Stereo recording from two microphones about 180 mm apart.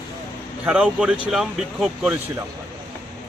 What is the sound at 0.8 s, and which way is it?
Speech, 5° right (ahead or behind).